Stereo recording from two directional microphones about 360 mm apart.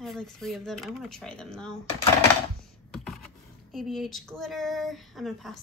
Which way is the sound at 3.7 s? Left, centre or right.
Centre.